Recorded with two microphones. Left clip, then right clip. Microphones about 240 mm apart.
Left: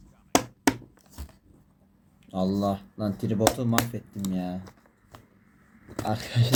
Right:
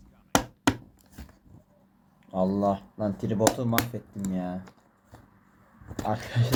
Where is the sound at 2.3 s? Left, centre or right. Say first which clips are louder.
Right 2 dB; left.